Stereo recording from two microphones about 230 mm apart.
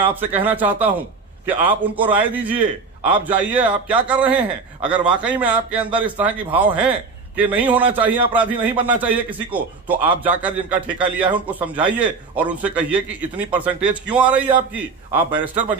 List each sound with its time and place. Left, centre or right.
0.0 s a man's voice: centre